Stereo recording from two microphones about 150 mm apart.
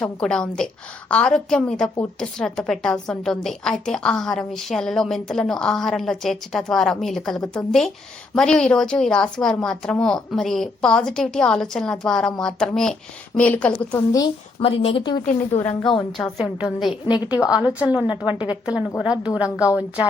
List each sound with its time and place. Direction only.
0.0 s a woman's voice: 5° left (ahead or behind)
14.6 s speech: 40° left (ahead or behind)
15.2 s speech: 55° left (ahead or behind)
16.1 s a woman's voice: centre (ahead or behind)
16.9 s a woman's voice: 30° left (ahead or behind)
17.5 s a woman's voice: 5° right (ahead or behind)